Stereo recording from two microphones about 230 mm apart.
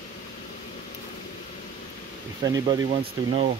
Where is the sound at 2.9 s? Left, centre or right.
Right.